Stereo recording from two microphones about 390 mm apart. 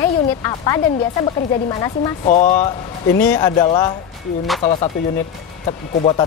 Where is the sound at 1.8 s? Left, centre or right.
Centre.